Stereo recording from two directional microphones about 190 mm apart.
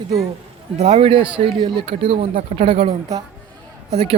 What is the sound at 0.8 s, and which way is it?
Speech, 30° right (ahead or behind).